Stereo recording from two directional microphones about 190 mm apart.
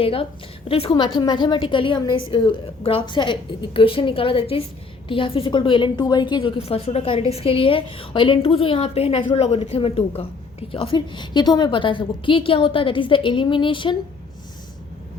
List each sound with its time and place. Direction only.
0.0 s a woman's voice: 30° left (ahead or behind)